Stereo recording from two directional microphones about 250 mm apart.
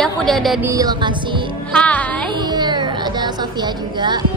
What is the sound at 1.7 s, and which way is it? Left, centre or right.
Speech, centre.